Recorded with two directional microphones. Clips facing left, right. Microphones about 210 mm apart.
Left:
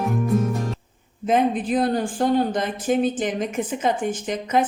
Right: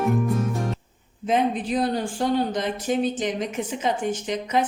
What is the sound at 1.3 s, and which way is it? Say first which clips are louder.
Speech: left 3 dB; 50° left (ahead or behind).